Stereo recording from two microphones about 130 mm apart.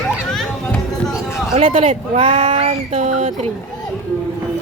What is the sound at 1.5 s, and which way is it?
Speech, 50° right (ahead or behind).